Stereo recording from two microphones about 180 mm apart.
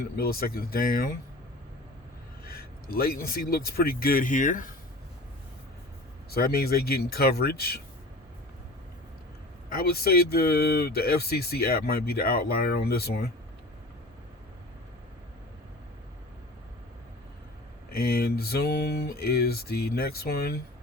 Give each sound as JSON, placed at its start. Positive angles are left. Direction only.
{"t": 0.2, "sound": "speech", "side_deg": 55}
{"t": 2.4, "sound": "speech", "side_deg": 55}
{"t": 6.3, "sound": "speech", "side_deg": 60}
{"t": 9.7, "sound": "speech", "side_deg": 60}
{"t": 17.9, "sound": "speech", "side_deg": 60}